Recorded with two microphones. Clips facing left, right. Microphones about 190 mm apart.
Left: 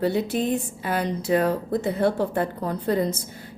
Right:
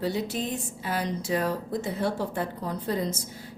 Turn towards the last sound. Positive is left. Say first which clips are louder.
# left 5 dB
turn(degrees=60)  # may be behind; listen again after turning